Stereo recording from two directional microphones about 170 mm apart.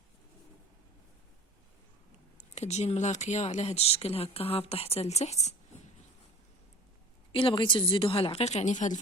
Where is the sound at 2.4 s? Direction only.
40° left (ahead or behind).